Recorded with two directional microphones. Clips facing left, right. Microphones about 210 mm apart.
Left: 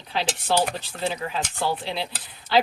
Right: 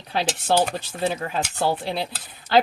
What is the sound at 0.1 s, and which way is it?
Speech, 50° right (ahead or behind).